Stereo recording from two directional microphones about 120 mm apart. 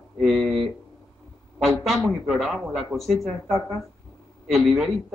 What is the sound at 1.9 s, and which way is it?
Speech, centre (ahead or behind).